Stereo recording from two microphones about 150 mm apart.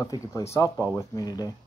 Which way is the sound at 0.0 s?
20° left (ahead or behind).